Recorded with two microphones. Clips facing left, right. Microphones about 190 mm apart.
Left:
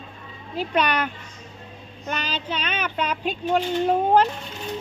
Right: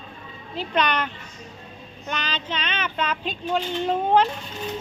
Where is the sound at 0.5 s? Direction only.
10° left (ahead or behind).